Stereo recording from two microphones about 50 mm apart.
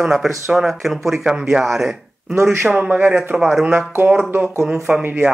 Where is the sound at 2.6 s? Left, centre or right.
Right.